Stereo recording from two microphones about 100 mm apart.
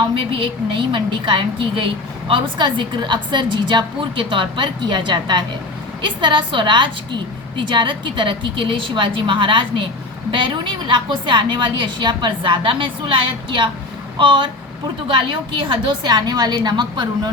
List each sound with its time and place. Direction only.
0.1 s a woman's voice: 60° right (ahead or behind); by 17.1 s 45° right (ahead or behind)